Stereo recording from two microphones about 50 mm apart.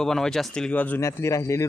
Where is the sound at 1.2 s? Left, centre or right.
Left.